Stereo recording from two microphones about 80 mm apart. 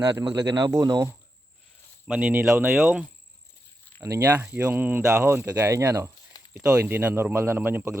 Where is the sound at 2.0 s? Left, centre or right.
Centre.